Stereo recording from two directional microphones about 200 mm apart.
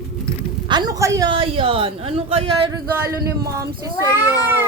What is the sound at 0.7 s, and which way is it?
Speech, 20° right (ahead or behind).